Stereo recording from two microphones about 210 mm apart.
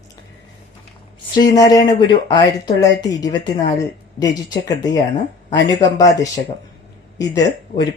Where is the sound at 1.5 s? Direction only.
15° left (ahead or behind).